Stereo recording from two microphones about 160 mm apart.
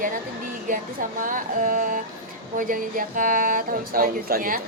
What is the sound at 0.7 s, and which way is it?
Speech, 60° right (ahead or behind).